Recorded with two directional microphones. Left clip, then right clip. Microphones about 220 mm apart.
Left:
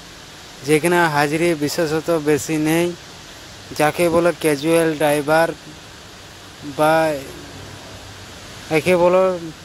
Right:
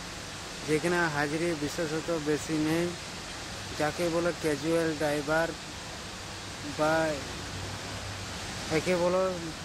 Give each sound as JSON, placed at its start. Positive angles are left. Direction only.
{"t": 0.7, "sound": "speech", "side_deg": 45}
{"t": 3.8, "sound": "speech", "side_deg": 45}
{"t": 6.8, "sound": "speech", "side_deg": 40}
{"t": 8.7, "sound": "speech", "side_deg": 45}